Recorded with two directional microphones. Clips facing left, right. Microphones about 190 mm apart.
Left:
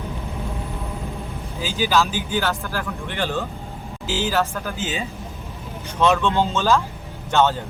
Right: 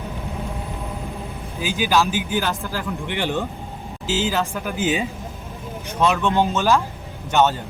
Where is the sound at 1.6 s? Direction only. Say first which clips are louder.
Right 1 dB; 15° right (ahead or behind).